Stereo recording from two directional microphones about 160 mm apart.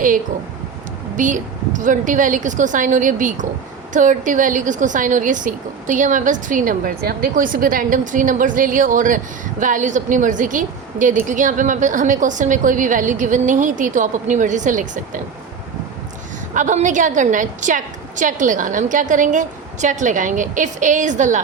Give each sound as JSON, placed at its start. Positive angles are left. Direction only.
{"t": 1.1, "sound": "a woman's voice", "side_deg": -55}
{"t": 16.6, "sound": "a woman's voice", "side_deg": -50}